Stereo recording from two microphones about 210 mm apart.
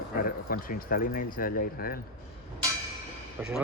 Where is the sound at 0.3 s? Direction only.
45° left (ahead or behind).